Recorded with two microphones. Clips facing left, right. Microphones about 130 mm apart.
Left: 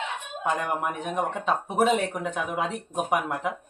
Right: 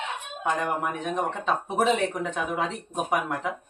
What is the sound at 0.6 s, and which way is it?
Speech, 10° left (ahead or behind).